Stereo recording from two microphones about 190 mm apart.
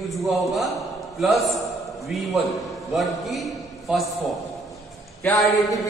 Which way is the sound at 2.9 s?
Centre (ahead or behind).